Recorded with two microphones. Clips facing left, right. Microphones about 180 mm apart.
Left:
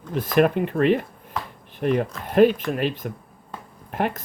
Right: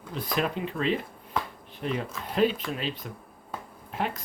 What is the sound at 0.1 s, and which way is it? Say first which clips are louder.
Speech: left 10 dB; 60° left (ahead or behind).